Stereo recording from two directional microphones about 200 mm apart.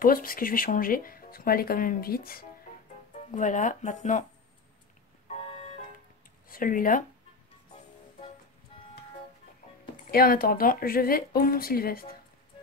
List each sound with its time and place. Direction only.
0.0 s speech: 45° left (ahead or behind)
6.5 s speech: 45° left (ahead or behind)
10.1 s speech: 45° left (ahead or behind)